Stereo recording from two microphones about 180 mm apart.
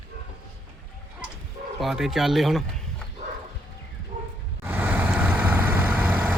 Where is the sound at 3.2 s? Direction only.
40° right (ahead or behind).